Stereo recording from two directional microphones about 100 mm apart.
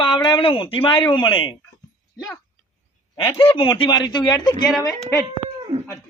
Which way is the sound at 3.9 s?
45° left (ahead or behind).